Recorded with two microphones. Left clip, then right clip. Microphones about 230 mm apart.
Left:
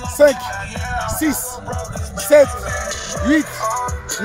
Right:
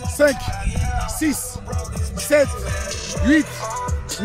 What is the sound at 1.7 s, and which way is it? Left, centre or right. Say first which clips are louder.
Music: left 5 dB; right.